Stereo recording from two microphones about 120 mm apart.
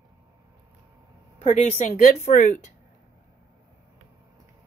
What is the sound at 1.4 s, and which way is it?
Speech, 65° left (ahead or behind).